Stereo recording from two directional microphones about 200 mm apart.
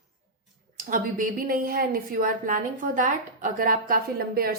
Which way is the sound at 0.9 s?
45° right (ahead or behind).